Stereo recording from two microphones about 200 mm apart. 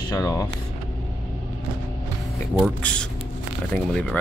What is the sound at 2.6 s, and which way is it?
Speech, 5° left (ahead or behind).